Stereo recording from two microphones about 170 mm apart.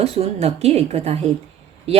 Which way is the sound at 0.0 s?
35° right (ahead or behind).